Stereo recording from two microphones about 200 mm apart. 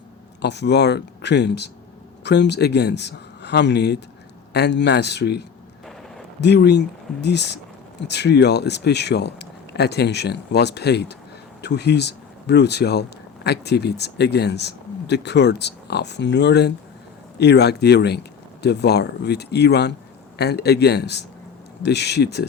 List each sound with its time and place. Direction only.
0.4 s speech: 60° left (ahead or behind)